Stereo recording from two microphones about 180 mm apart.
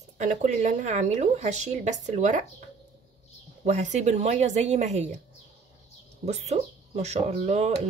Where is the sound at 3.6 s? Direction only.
40° right (ahead or behind).